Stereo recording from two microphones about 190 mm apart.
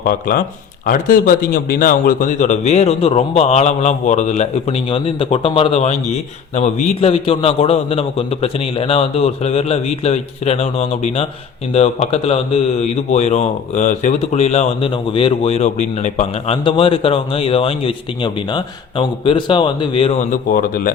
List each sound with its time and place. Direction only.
0.0 s a man's voice: 50° left (ahead or behind); by 20.2 s 30° left (ahead or behind)
20.3 s speech: 50° left (ahead or behind)